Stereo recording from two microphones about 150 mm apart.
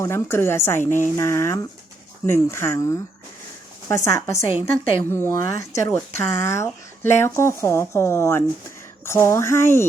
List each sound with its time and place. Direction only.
0.0 s speech: 15° left (ahead or behind)